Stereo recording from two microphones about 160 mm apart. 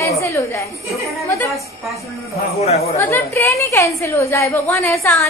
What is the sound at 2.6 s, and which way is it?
Speech, 40° left (ahead or behind).